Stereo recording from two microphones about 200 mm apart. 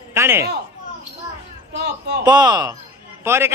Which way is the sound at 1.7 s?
55° right (ahead or behind).